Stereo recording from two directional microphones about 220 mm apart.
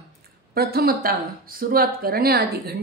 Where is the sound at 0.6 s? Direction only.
45° right (ahead or behind).